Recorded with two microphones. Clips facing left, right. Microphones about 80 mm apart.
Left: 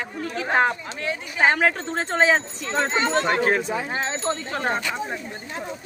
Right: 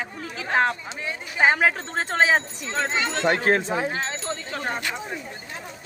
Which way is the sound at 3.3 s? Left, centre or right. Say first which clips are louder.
Even; right.